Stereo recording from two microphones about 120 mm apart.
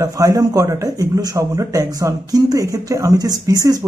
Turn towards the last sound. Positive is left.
turn(degrees=-30)  # may be behind; listen again after turning